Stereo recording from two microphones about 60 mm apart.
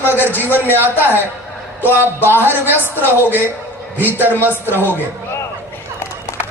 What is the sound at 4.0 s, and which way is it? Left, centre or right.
Speech, right.